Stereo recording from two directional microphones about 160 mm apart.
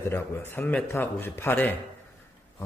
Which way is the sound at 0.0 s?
15° left (ahead or behind).